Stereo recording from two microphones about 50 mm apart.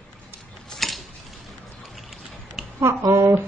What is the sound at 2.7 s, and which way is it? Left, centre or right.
Speech, right.